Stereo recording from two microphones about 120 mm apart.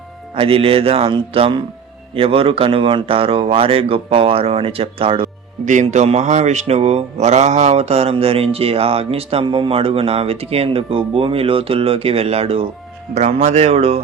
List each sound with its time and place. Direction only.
0.3 s speech: 50° right (ahead or behind)
5.6 s speech: 85° right; by 12.6 s 55° right (ahead or behind)
13.1 s speech: 70° right (ahead or behind)